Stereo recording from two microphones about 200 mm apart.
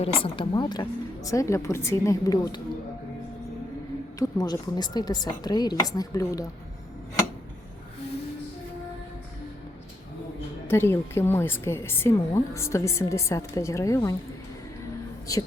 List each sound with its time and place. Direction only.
0.0 s a woman's voice: 25° left (ahead or behind)
4.2 s speech: 20° left (ahead or behind)
10.7 s a woman's voice: 10° left (ahead or behind)
15.3 s a woman's voice: 15° left (ahead or behind)